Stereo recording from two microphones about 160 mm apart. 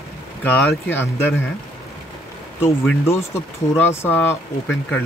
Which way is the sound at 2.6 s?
15° left (ahead or behind).